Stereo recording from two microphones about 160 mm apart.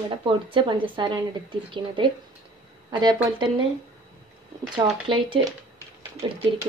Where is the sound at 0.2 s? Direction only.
30° right (ahead or behind).